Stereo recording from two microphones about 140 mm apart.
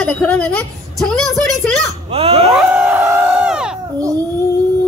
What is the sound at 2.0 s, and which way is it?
Dog, 40° right (ahead or behind).